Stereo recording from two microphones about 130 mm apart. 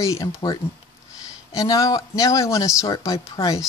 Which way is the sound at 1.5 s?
25° left (ahead or behind).